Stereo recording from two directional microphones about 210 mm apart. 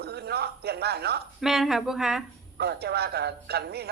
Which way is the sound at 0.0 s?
50° right (ahead or behind).